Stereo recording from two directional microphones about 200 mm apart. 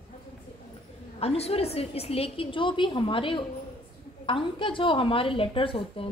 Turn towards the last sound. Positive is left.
turn(degrees=25)  # may be behind; listen again after turning